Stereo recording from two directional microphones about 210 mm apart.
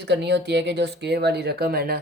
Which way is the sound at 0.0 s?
55° right (ahead or behind).